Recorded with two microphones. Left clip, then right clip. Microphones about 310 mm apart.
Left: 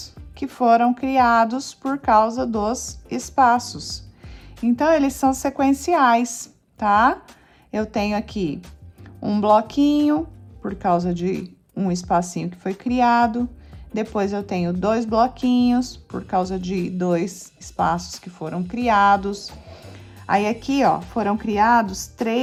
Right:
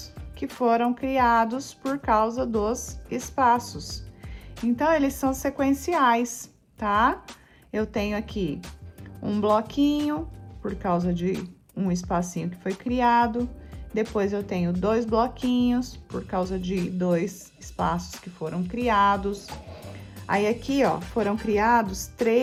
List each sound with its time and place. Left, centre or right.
0.0 s a woman's voice: centre
15.4 s speech: left
15.7 s speech: centre